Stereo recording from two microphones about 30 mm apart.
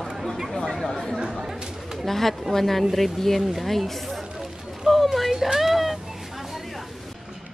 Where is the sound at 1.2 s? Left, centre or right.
Centre.